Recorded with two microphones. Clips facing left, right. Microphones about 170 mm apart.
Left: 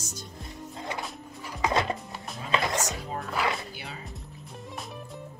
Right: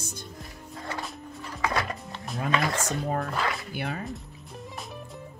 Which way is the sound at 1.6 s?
25° left (ahead or behind).